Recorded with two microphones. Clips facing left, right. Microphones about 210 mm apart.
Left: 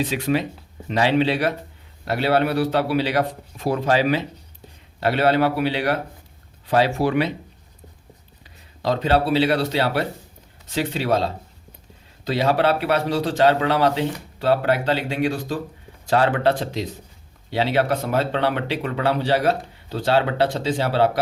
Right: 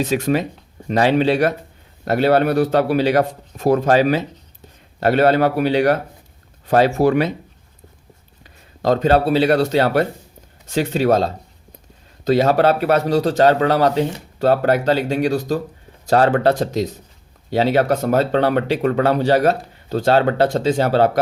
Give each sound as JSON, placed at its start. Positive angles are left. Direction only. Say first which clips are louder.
{"t": 0.0, "sound": "speech", "louder": "right 3 dB", "side_deg": -45}
{"t": 8.4, "sound": "speech", "louder": "right 5 dB", "side_deg": -45}